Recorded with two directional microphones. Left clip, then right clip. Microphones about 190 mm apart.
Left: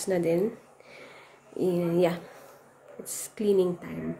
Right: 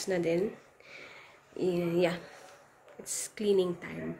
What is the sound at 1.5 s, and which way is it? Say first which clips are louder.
Speech: left 4 dB; 20° left (ahead or behind).